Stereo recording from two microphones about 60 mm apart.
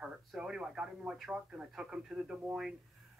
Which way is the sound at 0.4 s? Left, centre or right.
Centre.